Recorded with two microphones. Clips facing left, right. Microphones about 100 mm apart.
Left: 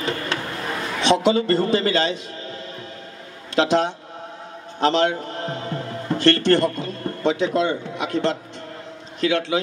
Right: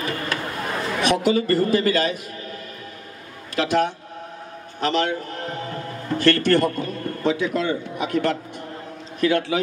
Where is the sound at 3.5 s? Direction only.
25° left (ahead or behind).